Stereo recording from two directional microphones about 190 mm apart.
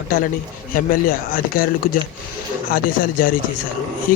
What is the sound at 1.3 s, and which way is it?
Speech, 50° left (ahead or behind).